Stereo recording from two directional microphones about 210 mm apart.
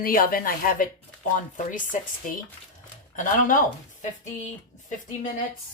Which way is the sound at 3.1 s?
40° left (ahead or behind).